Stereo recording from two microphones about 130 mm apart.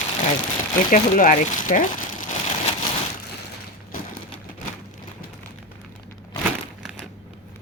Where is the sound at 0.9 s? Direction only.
90° left.